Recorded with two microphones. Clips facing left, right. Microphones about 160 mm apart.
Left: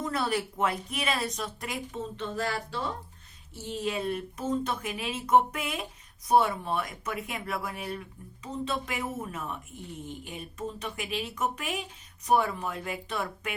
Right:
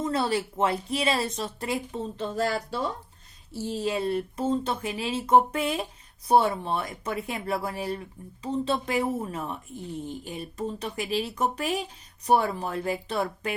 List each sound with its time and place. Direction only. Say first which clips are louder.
0.0 s speech: right 3 dB; 30° right (ahead or behind)